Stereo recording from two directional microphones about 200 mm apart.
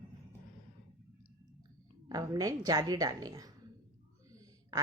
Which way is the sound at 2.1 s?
15° right (ahead or behind).